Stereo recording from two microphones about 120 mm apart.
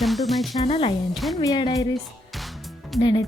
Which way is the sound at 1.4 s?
35° left (ahead or behind).